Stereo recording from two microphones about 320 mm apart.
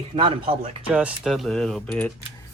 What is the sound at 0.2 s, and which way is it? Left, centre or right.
Speech, centre.